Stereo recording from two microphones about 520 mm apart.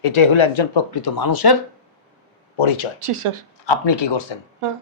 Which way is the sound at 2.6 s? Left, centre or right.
Left.